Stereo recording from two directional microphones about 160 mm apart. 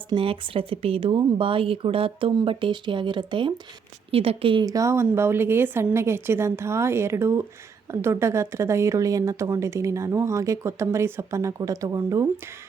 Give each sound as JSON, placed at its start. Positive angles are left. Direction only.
{"t": 0.1, "sound": "speech", "side_deg": -35}
{"t": 4.6, "sound": "a woman's voice", "side_deg": -20}